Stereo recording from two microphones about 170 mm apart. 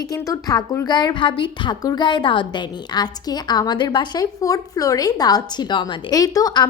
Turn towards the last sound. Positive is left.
turn(degrees=25)  # may be behind; listen again after turning